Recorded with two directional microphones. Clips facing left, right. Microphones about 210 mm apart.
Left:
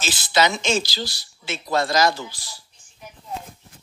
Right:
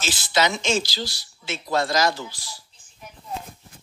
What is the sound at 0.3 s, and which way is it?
Speech, 70° left (ahead or behind).